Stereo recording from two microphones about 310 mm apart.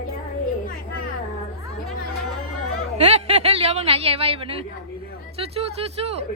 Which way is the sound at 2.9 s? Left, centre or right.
Centre.